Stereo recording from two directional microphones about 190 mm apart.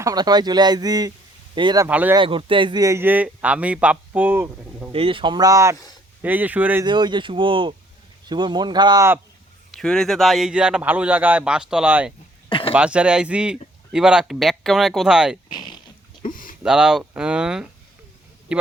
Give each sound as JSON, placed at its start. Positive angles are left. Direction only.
{"t": 0.0, "sound": "speech", "side_deg": -20}
{"t": 1.9, "sound": "a man's voice", "side_deg": -10}
{"t": 2.1, "sound": "a man's voice", "side_deg": -25}
{"t": 4.9, "sound": "a man's voice", "side_deg": -30}
{"t": 6.8, "sound": "speech", "side_deg": -25}
{"t": 9.7, "sound": "a man's voice", "side_deg": 5}
{"t": 12.5, "sound": "a sound", "side_deg": 25}
{"t": 12.7, "sound": "a man's voice", "side_deg": -5}
{"t": 15.4, "sound": "a sound", "side_deg": 25}
{"t": 16.3, "sound": "a sound", "side_deg": 45}
{"t": 16.6, "sound": "a man's voice", "side_deg": -5}